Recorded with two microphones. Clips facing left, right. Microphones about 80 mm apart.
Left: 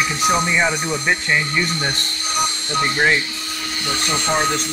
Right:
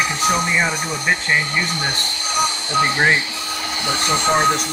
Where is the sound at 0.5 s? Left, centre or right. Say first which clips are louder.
Left 1 dB; centre.